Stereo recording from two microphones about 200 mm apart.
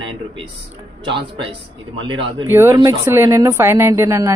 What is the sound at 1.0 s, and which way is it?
Speech, 25° right (ahead or behind).